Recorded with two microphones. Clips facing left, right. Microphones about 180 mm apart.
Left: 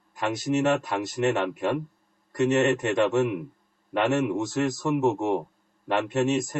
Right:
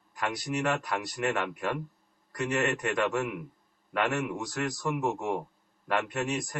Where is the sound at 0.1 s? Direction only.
25° left (ahead or behind).